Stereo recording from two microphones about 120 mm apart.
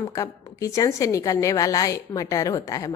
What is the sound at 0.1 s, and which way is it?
A woman's voice, 30° left (ahead or behind).